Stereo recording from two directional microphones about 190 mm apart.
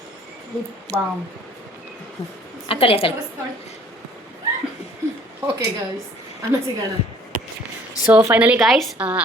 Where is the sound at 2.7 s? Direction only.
30° left (ahead or behind).